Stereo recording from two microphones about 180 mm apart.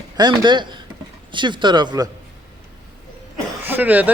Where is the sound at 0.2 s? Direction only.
25° right (ahead or behind).